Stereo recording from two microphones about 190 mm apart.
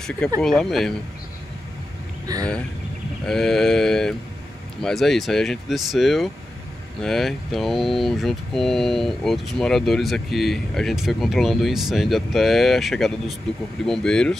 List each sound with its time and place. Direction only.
0.4 s speech: centre (ahead or behind)
2.3 s speech: 20° right (ahead or behind)
3.3 s speech: centre (ahead or behind)